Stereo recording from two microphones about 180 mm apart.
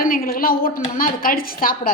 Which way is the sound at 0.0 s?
55° left (ahead or behind).